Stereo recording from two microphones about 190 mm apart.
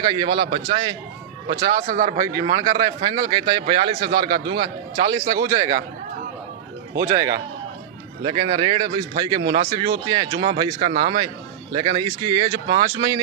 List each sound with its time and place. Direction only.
0.0 s a man's voice: 25° right (ahead or behind)
1.5 s speech: 40° right (ahead or behind)
2.3 s a man's voice: 20° right (ahead or behind)
7.2 s a man's voice: 20° right (ahead or behind)